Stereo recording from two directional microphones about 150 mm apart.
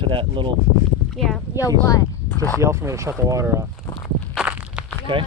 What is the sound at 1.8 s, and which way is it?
Speech, 25° left (ahead or behind).